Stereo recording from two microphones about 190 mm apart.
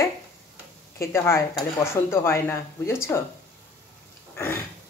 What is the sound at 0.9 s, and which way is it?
Speech, 15° left (ahead or behind).